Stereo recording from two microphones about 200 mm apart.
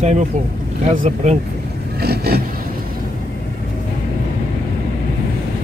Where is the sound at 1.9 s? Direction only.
50° right (ahead or behind).